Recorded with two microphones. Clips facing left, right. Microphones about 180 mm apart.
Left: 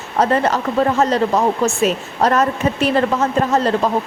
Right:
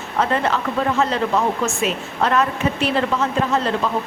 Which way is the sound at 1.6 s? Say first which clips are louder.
Left 5 dB; 40° left (ahead or behind).